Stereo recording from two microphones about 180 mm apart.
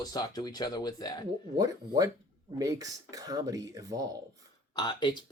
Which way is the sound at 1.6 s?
20° right (ahead or behind).